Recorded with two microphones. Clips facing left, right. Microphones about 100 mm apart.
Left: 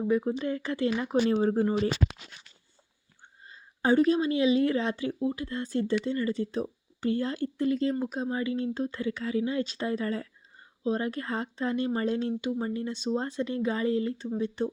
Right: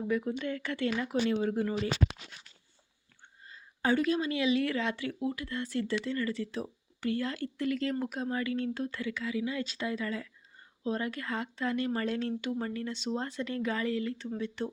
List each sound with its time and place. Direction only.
0.1 s speech: 35° left (ahead or behind)
3.4 s speech: 30° left (ahead or behind)